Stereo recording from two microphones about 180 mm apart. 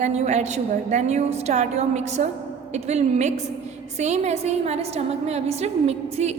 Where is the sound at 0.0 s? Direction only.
40° right (ahead or behind).